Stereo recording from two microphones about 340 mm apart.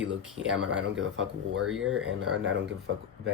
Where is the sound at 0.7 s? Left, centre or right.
Centre.